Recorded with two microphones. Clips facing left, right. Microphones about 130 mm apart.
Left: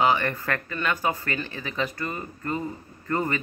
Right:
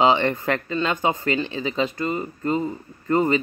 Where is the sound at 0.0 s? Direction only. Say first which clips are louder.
Right 4 dB; 25° right (ahead or behind).